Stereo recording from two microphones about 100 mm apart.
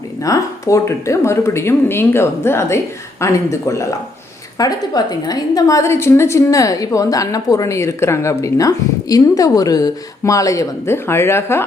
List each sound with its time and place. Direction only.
0.3 s a woman's voice: 35° left (ahead or behind)